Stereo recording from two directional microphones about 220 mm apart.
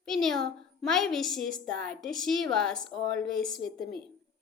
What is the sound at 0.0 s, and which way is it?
A child's voice, centre (ahead or behind).